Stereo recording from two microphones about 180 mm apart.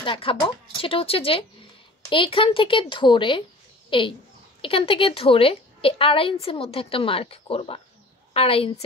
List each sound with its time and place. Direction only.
0.0 s a woman's voice: 30° left (ahead or behind)